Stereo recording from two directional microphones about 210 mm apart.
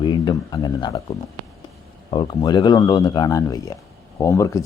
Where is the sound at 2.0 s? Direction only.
20° left (ahead or behind).